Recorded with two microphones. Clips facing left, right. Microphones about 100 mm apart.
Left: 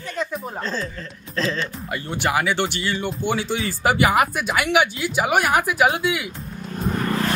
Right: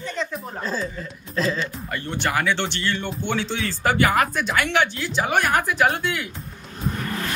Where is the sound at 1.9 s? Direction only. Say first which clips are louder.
Left 2 dB; 10° left (ahead or behind).